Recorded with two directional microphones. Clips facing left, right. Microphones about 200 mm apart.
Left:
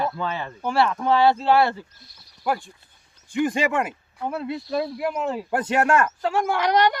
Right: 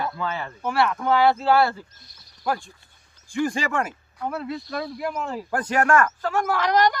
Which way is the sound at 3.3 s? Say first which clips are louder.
Left 2 dB; 20° left (ahead or behind).